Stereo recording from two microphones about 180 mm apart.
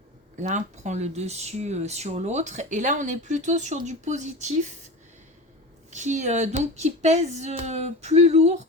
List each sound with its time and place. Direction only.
0.4 s speech: 40° right (ahead or behind)
5.9 s speech: 40° right (ahead or behind)